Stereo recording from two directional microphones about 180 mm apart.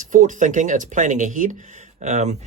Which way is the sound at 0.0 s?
45° right (ahead or behind).